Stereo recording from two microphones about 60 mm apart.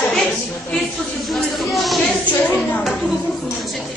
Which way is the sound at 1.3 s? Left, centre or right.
Centre.